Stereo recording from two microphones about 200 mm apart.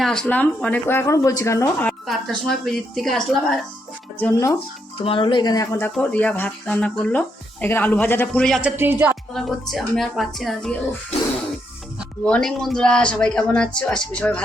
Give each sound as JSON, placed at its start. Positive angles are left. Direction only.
{"t": 0.0, "sound": "speech", "side_deg": 5}
{"t": 1.9, "sound": "a woman's voice", "side_deg": 0}
{"t": 4.2, "sound": "speech", "side_deg": 15}
{"t": 4.9, "sound": "speech", "side_deg": 25}
{"t": 5.9, "sound": "speech", "side_deg": 5}
{"t": 8.7, "sound": "speech", "side_deg": -10}
{"t": 9.3, "sound": "speech", "side_deg": 0}
{"t": 12.2, "sound": "speech", "side_deg": 5}